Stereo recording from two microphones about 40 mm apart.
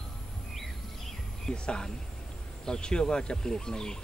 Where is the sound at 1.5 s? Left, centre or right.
Left.